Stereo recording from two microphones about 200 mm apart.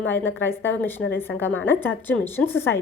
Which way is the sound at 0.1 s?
10° left (ahead or behind).